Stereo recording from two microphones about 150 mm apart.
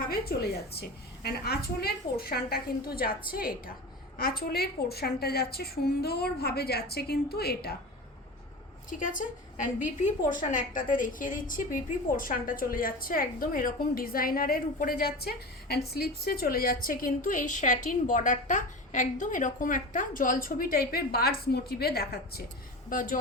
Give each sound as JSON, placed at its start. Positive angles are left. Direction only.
{"t": 0.1, "sound": "a woman's voice", "side_deg": 90}
{"t": 8.9, "sound": "a woman's voice", "side_deg": 60}
{"t": 22.9, "sound": "a woman's voice", "side_deg": 65}